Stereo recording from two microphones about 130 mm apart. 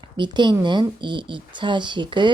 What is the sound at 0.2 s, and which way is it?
Speech, 35° right (ahead or behind).